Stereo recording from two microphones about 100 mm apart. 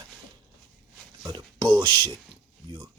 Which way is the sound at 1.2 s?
40° right (ahead or behind).